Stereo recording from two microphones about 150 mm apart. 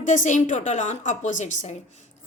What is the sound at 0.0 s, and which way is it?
A woman's voice, 55° left (ahead or behind).